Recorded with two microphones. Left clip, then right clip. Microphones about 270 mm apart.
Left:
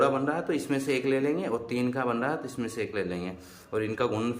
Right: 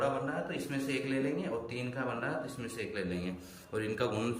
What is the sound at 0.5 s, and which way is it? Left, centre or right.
A man's voice, centre.